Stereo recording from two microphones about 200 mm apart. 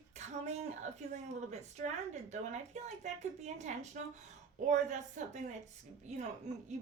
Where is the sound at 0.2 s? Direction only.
35° right (ahead or behind).